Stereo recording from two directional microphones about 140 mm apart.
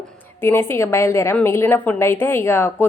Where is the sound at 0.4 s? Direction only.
15° left (ahead or behind).